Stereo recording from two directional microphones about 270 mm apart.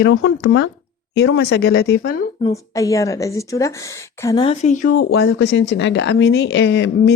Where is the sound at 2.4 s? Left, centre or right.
Centre.